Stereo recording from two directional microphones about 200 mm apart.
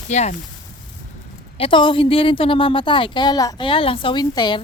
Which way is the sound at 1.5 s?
25° left (ahead or behind).